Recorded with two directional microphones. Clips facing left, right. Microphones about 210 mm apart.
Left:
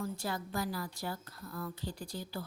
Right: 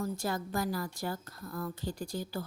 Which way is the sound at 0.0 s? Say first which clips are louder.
Right 3 dB; 45° right (ahead or behind).